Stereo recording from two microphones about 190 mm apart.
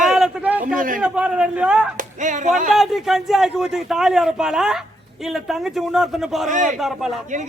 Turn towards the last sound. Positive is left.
turn(degrees=0)  # may be behind; listen again after turning